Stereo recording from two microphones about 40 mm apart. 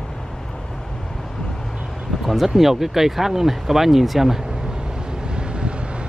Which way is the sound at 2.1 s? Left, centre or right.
Centre.